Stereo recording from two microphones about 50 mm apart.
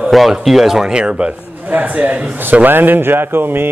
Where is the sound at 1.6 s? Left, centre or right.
Right.